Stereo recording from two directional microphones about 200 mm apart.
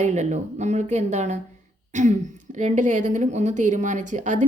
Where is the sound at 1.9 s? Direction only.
40° right (ahead or behind).